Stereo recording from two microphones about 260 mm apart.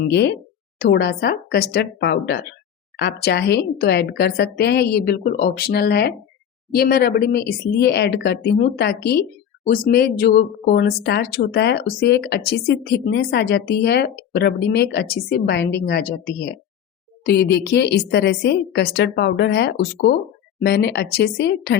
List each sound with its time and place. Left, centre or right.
0.1 s speech: left
17.2 s speech: left